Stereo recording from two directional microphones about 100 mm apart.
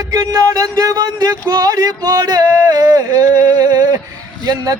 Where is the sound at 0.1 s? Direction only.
40° right (ahead or behind).